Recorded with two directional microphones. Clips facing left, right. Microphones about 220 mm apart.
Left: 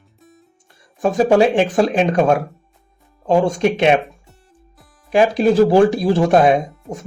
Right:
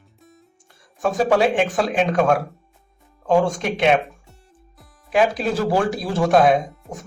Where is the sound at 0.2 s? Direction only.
Centre (ahead or behind).